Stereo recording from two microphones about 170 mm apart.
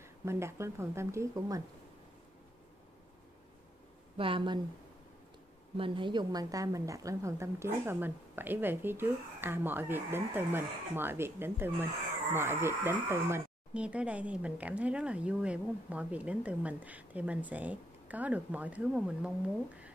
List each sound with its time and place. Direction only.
0.0 s speech: 15° right (ahead or behind)
4.2 s speech: 30° right (ahead or behind)
5.8 s speech: 30° right (ahead or behind); by 19.3 s 5° right (ahead or behind)